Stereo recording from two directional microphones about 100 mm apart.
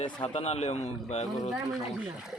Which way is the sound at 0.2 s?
90° left.